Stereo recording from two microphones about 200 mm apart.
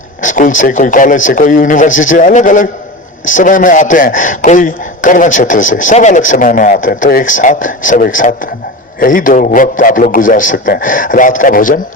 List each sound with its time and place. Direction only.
0.2 s speech: 40° left (ahead or behind)